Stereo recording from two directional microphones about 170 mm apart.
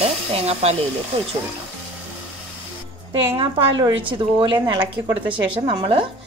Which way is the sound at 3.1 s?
30° right (ahead or behind).